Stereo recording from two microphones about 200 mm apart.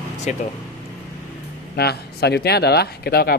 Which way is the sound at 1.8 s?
55° left (ahead or behind).